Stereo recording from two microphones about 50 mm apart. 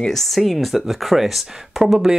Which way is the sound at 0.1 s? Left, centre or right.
Centre.